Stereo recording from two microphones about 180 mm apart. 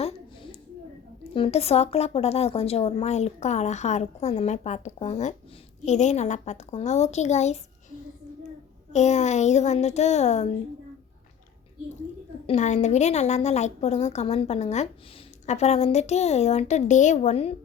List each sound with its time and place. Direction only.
1.3 s speech: 35° left (ahead or behind)
8.9 s speech: 40° left (ahead or behind)
12.5 s speech: 40° left (ahead or behind)